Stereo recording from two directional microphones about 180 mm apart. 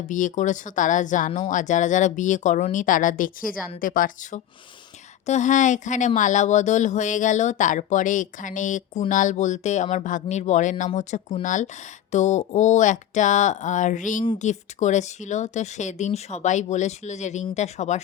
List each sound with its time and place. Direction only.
0.1 s speech: 45° left (ahead or behind)